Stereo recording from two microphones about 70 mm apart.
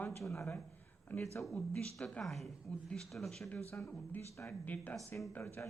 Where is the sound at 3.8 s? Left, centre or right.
Left.